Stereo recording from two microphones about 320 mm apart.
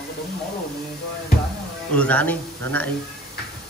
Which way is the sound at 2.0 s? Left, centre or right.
Centre.